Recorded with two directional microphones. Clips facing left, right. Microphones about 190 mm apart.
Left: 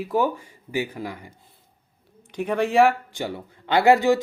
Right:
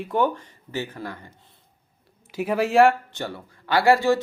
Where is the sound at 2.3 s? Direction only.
5° right (ahead or behind).